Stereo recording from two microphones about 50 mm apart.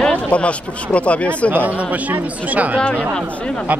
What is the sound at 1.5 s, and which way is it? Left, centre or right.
Speech, right.